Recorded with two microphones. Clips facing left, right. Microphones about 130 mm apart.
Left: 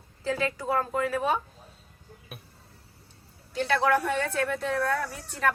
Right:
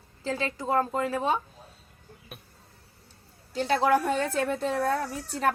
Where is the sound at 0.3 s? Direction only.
25° right (ahead or behind).